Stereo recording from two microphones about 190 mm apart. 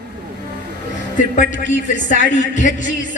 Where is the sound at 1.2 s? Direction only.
40° left (ahead or behind).